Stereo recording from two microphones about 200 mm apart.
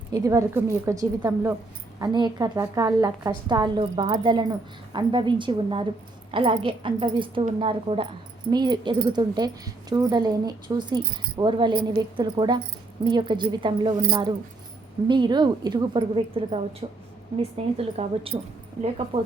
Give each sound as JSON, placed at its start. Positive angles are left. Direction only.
{"t": 0.1, "sound": "a woman's voice", "side_deg": -15}